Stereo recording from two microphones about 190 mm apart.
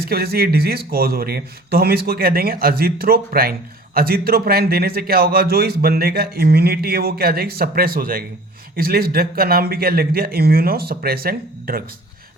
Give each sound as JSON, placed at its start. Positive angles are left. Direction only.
{"t": 0.0, "sound": "a man's voice", "side_deg": -55}